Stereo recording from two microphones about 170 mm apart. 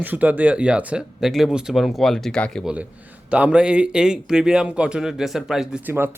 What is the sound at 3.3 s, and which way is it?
A man's voice, 5° right (ahead or behind).